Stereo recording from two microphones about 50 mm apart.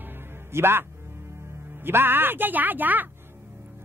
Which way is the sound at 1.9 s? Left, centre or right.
Right.